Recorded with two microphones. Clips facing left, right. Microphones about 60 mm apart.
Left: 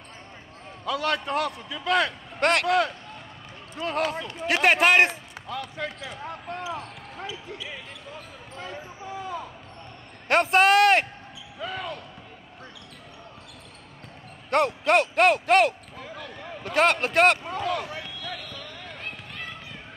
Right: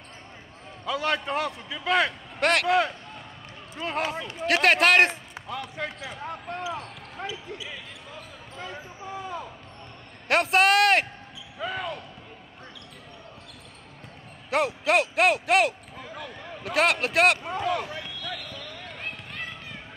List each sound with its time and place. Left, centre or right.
0.8 s a man's voice: right
2.4 s speech: centre
3.8 s speech: centre
4.2 s speech: centre
5.5 s a man's voice: centre
7.2 s basketball bounce: centre
10.2 s a man's voice: centre
14.5 s speech: centre
17.5 s a man's voice: centre